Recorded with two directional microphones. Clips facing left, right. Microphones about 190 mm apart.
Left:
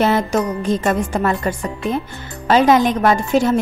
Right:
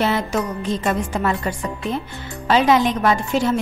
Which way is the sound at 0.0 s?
45° left (ahead or behind).